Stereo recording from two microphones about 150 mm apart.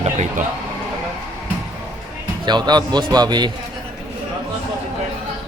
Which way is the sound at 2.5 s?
30° right (ahead or behind).